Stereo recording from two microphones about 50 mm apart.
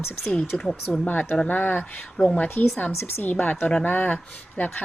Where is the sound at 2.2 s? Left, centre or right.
Left.